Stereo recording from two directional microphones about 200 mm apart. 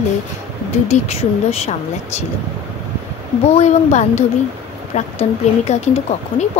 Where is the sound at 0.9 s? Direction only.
30° left (ahead or behind).